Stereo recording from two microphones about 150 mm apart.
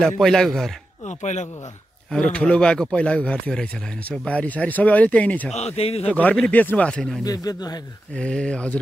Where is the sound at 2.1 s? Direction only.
10° left (ahead or behind).